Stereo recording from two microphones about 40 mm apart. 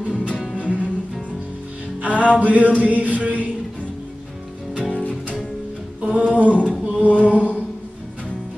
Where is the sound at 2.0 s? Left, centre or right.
Right.